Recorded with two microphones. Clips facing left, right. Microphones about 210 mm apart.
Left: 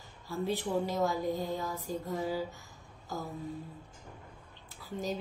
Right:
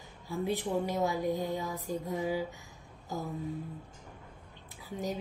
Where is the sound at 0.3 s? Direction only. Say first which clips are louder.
Even; 15° right (ahead or behind).